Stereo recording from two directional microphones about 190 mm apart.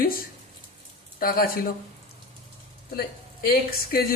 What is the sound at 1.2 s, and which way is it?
Speech, 50° left (ahead or behind).